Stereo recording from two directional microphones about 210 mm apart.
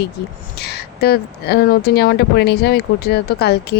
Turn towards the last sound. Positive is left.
turn(degrees=50)  # may be behind; listen again after turning